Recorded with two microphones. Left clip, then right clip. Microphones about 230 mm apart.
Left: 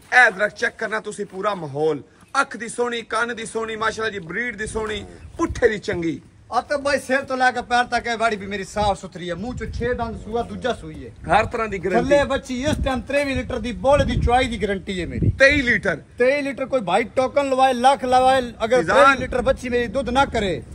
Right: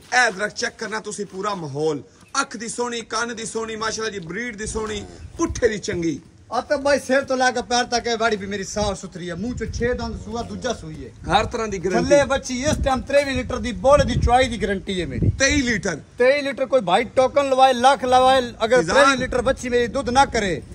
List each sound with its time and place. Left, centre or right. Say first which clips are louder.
0.1 s speech: left 4 dB; centre
6.5 s a man's voice: right 1 dB; left; by 9.9 s centre
9.9 s speech: left 4 dB; centre
11.2 s a man's voice: left 1 dB; centre
12.0 s a man's voice: right 2 dB; right
15.3 s a man's voice: left 5 dB; centre
16.2 s a man's voice: right 3 dB; right
18.9 s speech: left 3 dB; centre
19.1 s a man's voice: even; right